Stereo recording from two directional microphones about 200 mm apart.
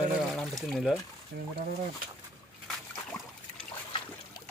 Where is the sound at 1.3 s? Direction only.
55° right (ahead or behind).